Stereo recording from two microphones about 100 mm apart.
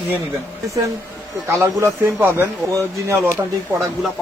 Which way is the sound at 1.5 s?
25° right (ahead or behind).